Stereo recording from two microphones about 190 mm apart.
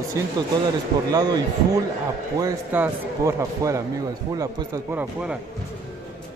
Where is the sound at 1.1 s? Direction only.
20° right (ahead or behind).